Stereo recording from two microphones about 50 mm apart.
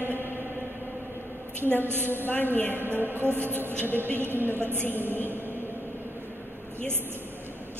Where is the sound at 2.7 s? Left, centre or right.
Right.